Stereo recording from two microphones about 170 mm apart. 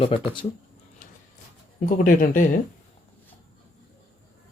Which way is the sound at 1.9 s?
50° left (ahead or behind).